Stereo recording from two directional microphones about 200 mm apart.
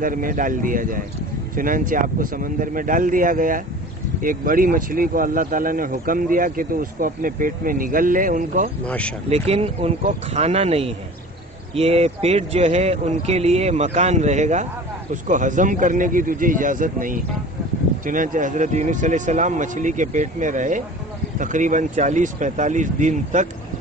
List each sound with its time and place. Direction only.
0.0 s speech: 45° right (ahead or behind)
8.8 s speech: 5° left (ahead or behind)
9.3 s speech: 30° right (ahead or behind)